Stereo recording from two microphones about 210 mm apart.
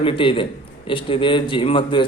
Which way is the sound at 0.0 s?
25° left (ahead or behind).